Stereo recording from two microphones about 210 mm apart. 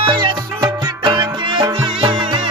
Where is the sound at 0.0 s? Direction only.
25° right (ahead or behind).